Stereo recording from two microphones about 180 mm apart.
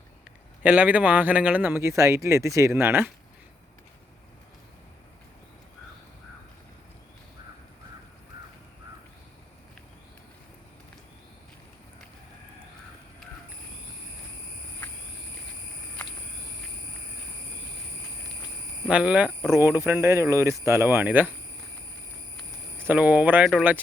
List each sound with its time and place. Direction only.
0.6 s speech: 10° right (ahead or behind)
18.9 s speech: 5° right (ahead or behind)
22.8 s speech: 10° right (ahead or behind)